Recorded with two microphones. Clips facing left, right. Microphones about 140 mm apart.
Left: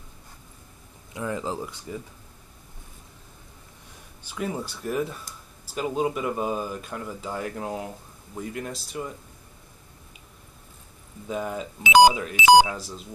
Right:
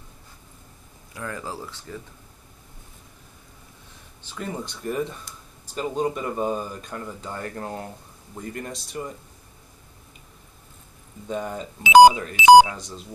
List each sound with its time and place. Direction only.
1.1 s speech: 20° left (ahead or behind)
4.2 s speech: 10° left (ahead or behind)
11.2 s speech: 5° left (ahead or behind)